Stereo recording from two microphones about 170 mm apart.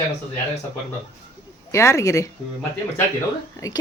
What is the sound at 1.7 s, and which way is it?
Speech, 15° left (ahead or behind).